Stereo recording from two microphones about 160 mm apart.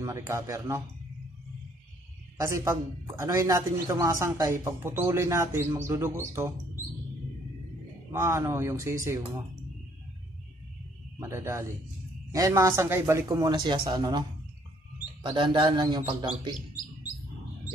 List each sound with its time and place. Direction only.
0.0 s speech: 20° right (ahead or behind)
2.3 s a man's voice: 20° right (ahead or behind)
8.1 s a man's voice: 15° right (ahead or behind)
11.1 s speech: 20° right (ahead or behind)
15.2 s a man's voice: 35° right (ahead or behind)